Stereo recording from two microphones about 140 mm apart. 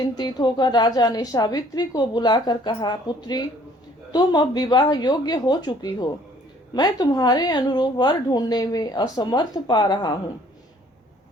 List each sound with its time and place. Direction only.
0.0 s a woman's voice: 30° left (ahead or behind)